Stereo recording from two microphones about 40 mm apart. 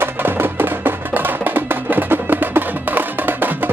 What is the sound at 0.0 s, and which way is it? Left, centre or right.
Music, right.